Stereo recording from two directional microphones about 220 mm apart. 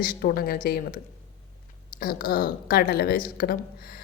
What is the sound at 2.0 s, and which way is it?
A woman's voice, 40° left (ahead or behind).